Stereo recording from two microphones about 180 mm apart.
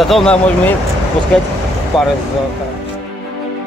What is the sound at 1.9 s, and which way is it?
Speech, centre (ahead or behind).